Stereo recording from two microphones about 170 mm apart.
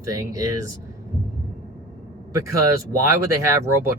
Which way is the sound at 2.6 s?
15° right (ahead or behind).